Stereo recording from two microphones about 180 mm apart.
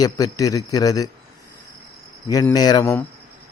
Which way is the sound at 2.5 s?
20° left (ahead or behind).